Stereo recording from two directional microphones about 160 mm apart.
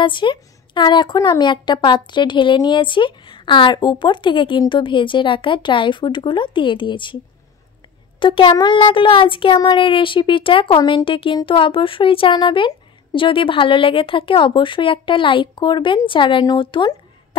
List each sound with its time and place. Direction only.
0.0 s a woman's voice: 30° left (ahead or behind)
8.2 s a woman's voice: 30° left (ahead or behind)